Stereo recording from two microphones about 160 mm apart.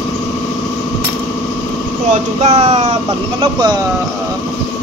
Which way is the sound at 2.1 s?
45° right (ahead or behind).